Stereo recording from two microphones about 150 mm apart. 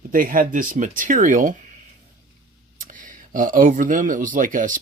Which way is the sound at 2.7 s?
60° right (ahead or behind).